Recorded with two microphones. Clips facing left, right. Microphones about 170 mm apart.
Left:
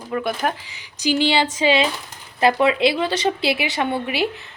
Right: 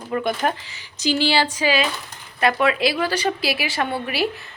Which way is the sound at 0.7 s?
15° left (ahead or behind).